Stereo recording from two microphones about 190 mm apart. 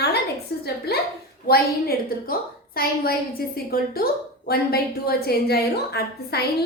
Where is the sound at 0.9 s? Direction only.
55° left (ahead or behind).